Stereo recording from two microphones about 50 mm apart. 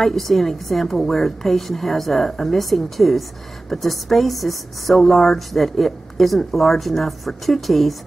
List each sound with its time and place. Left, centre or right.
0.0 s a woman's voice: centre